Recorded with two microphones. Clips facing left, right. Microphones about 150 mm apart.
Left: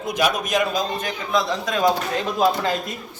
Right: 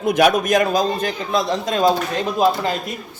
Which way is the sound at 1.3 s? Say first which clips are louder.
Right 1 dB; 25° right (ahead or behind).